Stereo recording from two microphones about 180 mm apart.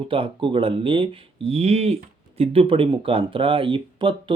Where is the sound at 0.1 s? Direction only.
30° right (ahead or behind).